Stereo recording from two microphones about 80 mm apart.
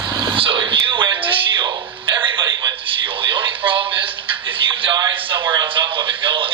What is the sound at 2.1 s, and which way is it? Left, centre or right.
Radio, right.